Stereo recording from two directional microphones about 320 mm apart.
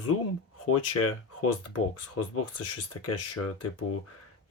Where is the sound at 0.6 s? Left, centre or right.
Left.